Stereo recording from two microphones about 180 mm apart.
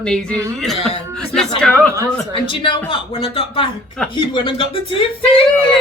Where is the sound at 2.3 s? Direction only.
30° left (ahead or behind).